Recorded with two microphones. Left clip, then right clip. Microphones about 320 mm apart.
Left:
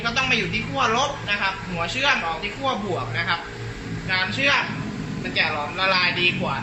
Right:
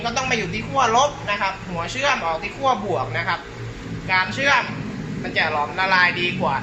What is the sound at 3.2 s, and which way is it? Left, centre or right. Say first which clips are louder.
A man's voice: even; centre.